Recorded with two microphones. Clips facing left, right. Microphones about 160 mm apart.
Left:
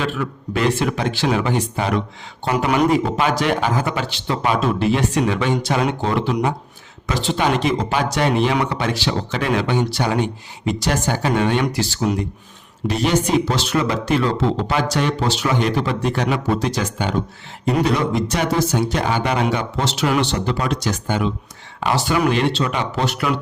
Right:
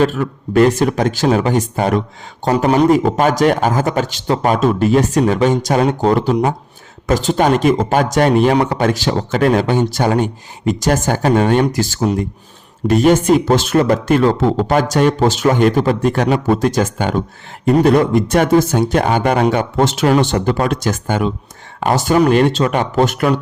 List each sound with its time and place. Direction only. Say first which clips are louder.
0.0 s speech: right 8 dB; 45° right (ahead or behind)